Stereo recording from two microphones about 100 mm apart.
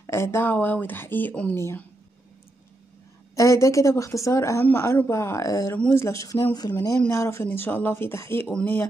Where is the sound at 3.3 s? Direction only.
30° left (ahead or behind).